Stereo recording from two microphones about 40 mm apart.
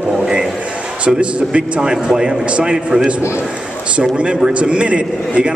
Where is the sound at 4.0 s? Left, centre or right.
Right.